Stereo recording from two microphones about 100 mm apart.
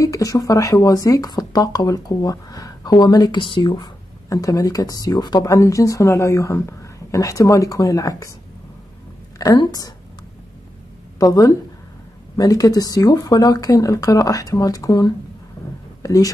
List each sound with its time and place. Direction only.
0.0 s speech: 35° left (ahead or behind); by 3.9 s 50° left (ahead or behind)
4.3 s speech: 35° left (ahead or behind)
5.5 s speech: 35° left (ahead or behind)
9.4 s speech: 40° left (ahead or behind)
11.1 s speech: 40° left (ahead or behind)
16.0 s a sound: 35° left (ahead or behind)